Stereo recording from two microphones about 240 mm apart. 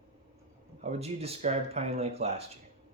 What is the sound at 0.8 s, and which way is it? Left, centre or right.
Speech, right.